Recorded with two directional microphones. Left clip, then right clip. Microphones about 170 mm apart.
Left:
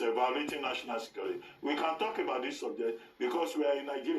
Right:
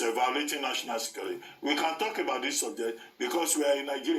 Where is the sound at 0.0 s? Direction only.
50° right (ahead or behind).